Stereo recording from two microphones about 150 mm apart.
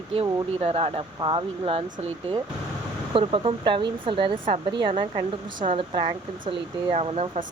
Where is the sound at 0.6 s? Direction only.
40° right (ahead or behind).